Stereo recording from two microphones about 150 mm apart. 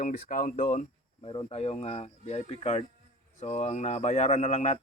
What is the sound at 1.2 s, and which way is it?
Speech, 35° left (ahead or behind).